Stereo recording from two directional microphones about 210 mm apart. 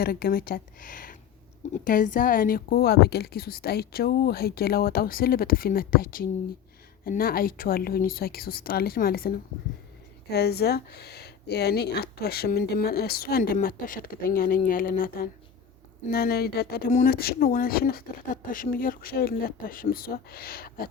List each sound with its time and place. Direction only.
0.0 s speech: 45° left (ahead or behind)